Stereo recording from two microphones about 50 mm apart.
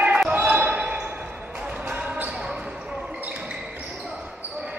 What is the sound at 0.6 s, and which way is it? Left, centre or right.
Basketball bounce, right.